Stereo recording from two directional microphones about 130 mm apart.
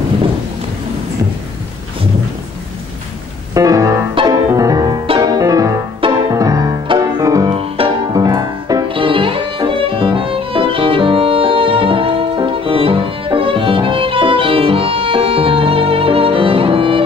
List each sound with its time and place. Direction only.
3.5 s music: 25° right (ahead or behind)
7.5 s music: 45° right (ahead or behind)
8.1 s music: 25° right (ahead or behind)
8.8 s violin: 40° right (ahead or behind)